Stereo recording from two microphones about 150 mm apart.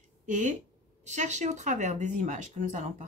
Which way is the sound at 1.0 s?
50° right (ahead or behind).